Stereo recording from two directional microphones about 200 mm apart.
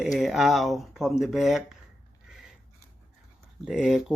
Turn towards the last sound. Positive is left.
turn(degrees=-5)  # may be behind; listen again after turning